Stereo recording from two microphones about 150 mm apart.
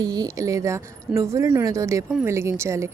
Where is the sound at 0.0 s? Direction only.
25° right (ahead or behind).